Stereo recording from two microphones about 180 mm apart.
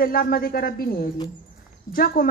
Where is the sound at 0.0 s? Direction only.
55° left (ahead or behind).